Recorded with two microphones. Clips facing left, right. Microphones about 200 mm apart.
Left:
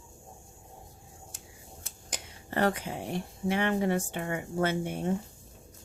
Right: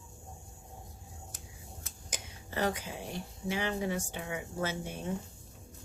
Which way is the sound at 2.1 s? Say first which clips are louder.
Left 5 dB; 60° left (ahead or behind).